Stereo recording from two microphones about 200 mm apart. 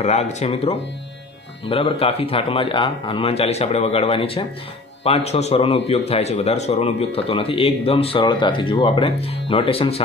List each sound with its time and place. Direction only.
0.0 s a man's voice: 35° left (ahead or behind)